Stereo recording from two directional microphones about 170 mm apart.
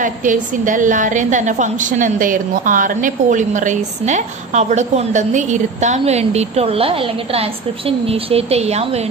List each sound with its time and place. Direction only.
0.0 s a woman's voice: 50° right (ahead or behind)